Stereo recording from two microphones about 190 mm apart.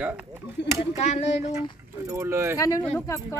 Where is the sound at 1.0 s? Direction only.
35° left (ahead or behind).